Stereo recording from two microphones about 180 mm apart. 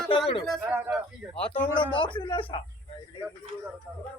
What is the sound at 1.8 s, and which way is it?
Speech, 25° left (ahead or behind).